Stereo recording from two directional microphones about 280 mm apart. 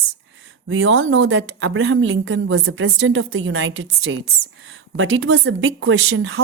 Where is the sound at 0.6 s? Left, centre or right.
Right.